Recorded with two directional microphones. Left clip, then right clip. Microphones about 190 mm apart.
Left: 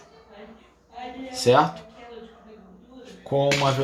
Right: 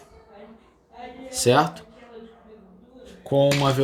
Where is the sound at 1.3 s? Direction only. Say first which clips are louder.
Left 1 dB; 50° right (ahead or behind).